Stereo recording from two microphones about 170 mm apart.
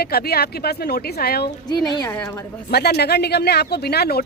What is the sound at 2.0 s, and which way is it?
Speech, 10° left (ahead or behind).